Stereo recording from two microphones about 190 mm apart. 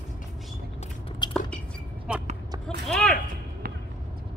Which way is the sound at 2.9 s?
5° left (ahead or behind).